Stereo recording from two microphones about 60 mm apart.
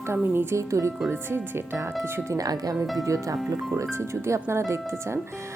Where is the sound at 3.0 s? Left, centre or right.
Right.